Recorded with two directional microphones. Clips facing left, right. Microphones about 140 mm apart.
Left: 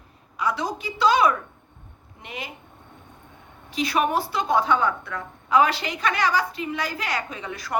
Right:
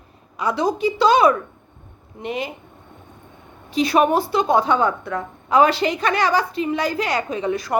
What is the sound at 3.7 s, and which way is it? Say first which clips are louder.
A woman's voice: right 6 dB; 25° right (ahead or behind).